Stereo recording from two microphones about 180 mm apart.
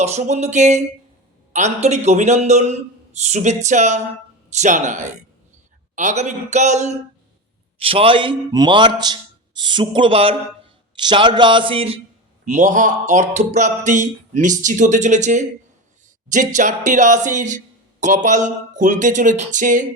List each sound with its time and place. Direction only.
0.0 s a man's voice: 40° right (ahead or behind)
12.5 s speech: 45° right (ahead or behind)